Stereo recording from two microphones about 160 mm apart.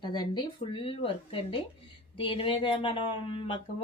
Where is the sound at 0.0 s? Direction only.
25° left (ahead or behind).